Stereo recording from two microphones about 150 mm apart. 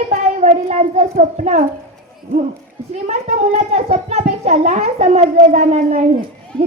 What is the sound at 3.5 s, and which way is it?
A child's voice, 45° right (ahead or behind).